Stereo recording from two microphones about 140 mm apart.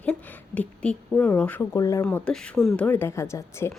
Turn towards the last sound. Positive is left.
turn(degrees=20)  # may be behind; listen again after turning